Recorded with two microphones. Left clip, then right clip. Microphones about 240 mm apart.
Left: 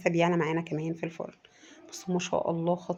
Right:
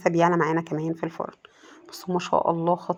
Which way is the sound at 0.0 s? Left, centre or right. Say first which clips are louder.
Right 6 dB; centre.